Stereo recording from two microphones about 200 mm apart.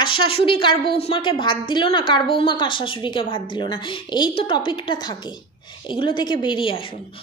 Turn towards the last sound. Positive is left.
turn(degrees=25)  # may be behind; listen again after turning